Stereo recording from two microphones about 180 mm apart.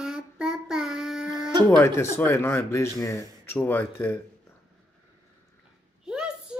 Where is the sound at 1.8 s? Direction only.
15° left (ahead or behind).